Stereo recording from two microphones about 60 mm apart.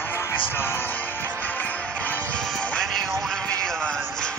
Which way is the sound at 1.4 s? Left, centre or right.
Left.